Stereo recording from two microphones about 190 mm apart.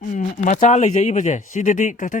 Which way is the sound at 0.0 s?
45° left (ahead or behind).